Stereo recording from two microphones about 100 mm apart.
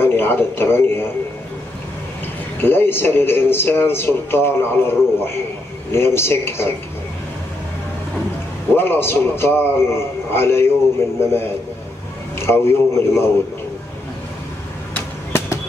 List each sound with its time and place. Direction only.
0.0 s speech: 20° left (ahead or behind)
2.6 s speech: 20° left (ahead or behind)
8.7 s speech: 20° left (ahead or behind)
12.4 s speech: 25° left (ahead or behind)
15.0 s arrow: 25° left (ahead or behind)